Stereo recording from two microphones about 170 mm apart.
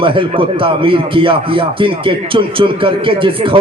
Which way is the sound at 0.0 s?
30° right (ahead or behind).